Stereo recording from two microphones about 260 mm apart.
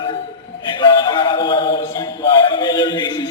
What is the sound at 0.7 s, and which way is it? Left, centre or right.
Music, centre.